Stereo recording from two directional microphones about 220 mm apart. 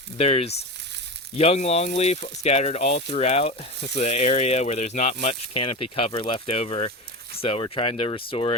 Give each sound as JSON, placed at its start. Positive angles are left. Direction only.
{"t": 0.2, "sound": "speech", "side_deg": 30}